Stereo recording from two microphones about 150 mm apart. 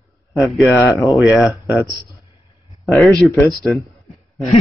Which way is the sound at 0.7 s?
20° left (ahead or behind).